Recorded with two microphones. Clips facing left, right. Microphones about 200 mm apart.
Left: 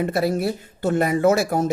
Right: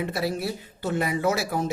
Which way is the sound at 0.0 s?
50° left (ahead or behind).